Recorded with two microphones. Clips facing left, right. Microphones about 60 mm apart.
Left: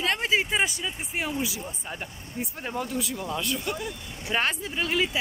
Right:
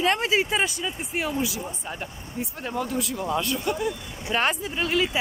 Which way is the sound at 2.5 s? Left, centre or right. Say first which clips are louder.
Right 3 dB; centre.